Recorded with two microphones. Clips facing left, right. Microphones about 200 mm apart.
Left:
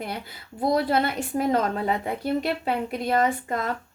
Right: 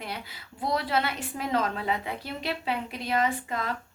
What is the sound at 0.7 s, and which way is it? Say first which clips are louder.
A woman's voice: left 4 dB; 45° left (ahead or behind).